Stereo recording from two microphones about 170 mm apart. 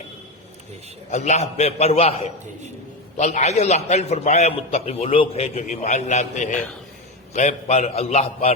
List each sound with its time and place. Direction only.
1.1 s a man's voice: 40° left (ahead or behind)